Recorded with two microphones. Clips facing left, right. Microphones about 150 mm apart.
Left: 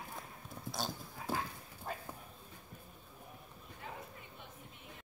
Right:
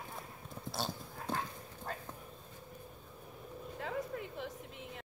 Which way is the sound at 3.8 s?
85° right.